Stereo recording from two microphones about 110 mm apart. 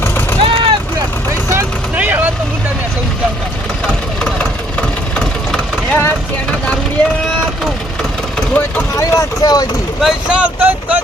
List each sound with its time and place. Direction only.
0.0 s vehicle: 20° left (ahead or behind)
0.4 s vehicle: 50° right (ahead or behind)
2.0 s vehicle: 15° right (ahead or behind)
3.8 s engine: 10° left (ahead or behind)
8.4 s vehicle: 15° left (ahead or behind)
9.0 s vehicle: 30° left (ahead or behind)
10.0 s vehicle: 5° right (ahead or behind)